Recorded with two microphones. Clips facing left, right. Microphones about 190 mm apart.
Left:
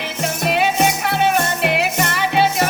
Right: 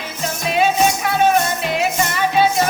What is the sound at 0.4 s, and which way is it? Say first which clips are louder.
Music: right 1 dB; 65° left (ahead or behind).